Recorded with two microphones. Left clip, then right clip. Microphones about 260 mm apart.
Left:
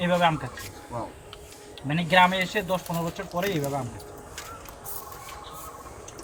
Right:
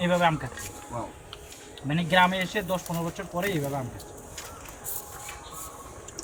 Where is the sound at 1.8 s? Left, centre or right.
Centre.